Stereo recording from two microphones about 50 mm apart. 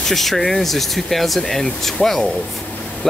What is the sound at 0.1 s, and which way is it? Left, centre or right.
Speech, centre.